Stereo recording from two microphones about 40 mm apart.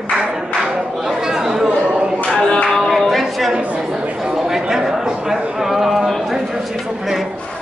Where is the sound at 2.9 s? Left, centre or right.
Centre.